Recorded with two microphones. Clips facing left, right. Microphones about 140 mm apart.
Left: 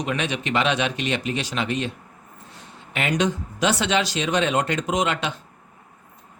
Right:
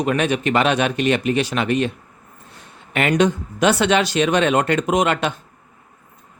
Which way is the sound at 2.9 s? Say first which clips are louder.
Right 6 dB; 55° right (ahead or behind).